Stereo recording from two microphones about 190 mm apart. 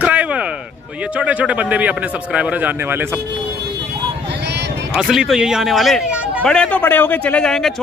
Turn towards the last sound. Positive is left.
turn(degrees=5)  # may be behind; listen again after turning